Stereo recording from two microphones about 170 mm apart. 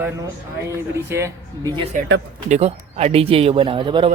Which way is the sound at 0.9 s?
15° right (ahead or behind).